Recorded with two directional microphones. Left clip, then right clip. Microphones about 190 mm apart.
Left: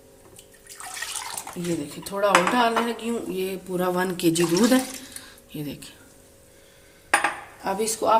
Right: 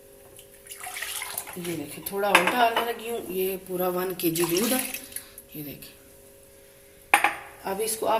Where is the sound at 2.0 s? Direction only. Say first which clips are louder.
Left 1 dB; 60° left (ahead or behind).